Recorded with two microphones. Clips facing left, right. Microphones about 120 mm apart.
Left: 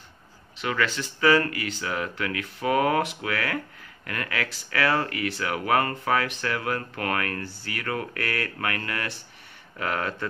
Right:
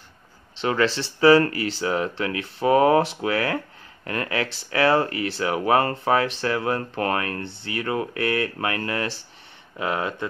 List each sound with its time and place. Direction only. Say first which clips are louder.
0.6 s speech: right 5 dB; 30° right (ahead or behind)